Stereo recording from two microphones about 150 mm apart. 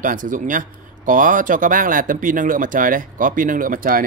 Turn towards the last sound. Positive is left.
turn(degrees=-70)  # may be behind; listen again after turning